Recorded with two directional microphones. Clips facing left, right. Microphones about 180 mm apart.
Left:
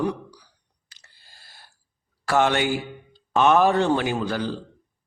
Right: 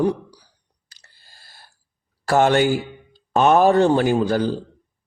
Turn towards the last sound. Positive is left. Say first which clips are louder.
# right 7 dB
turn(degrees=-40)  # may be behind; listen again after turning